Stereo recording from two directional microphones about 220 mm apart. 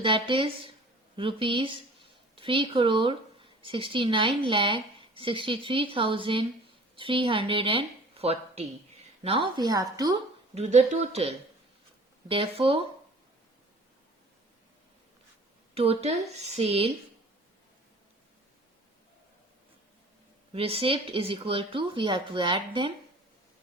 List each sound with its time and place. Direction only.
0.0 s a woman's voice: 25° right (ahead or behind)
10.5 s a woman's voice: 30° right (ahead or behind)
15.7 s a woman's voice: 25° right (ahead or behind)
20.5 s a woman's voice: 25° right (ahead or behind)